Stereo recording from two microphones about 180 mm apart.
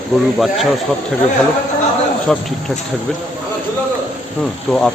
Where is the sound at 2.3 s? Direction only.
Centre (ahead or behind).